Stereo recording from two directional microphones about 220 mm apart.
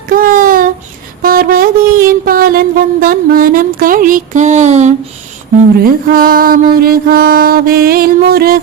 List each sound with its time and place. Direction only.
0.1 s child singing: 40° right (ahead or behind)
1.2 s mantra: 40° right (ahead or behind)